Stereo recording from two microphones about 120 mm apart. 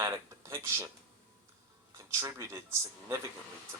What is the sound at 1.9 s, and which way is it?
Speech, 25° right (ahead or behind).